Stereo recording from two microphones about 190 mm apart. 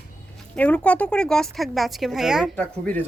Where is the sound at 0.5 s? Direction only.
5° left (ahead or behind).